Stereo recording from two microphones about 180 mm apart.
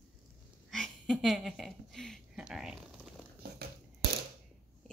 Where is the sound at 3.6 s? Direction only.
60° right (ahead or behind).